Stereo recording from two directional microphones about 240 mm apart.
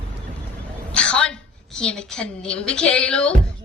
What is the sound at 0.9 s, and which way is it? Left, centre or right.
A woman's voice, centre.